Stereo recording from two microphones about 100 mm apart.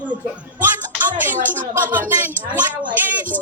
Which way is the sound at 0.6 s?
20° right (ahead or behind).